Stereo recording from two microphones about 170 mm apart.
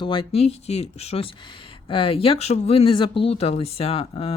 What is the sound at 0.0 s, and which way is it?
Speech, 30° left (ahead or behind).